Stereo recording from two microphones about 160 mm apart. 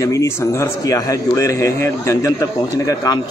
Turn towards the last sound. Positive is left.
turn(degrees=20)  # may be behind; listen again after turning